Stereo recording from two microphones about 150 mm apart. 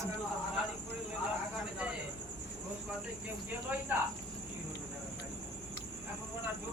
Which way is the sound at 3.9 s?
10° right (ahead or behind).